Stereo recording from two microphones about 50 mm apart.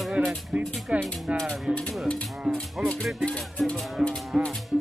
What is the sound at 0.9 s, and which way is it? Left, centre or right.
Speech, right.